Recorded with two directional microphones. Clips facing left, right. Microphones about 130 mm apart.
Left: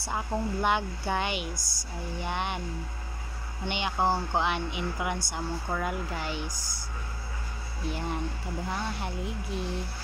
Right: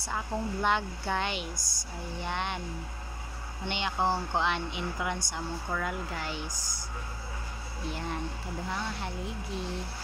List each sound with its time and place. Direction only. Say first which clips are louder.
0.1 s speech: left 2 dB; 10° left (ahead or behind)
1.6 s speech: left 1 dB; 20° right (ahead or behind)
2.2 s speech: left 1 dB; 10° left (ahead or behind)
3.6 s speech: left 2 dB; 10° left (ahead or behind)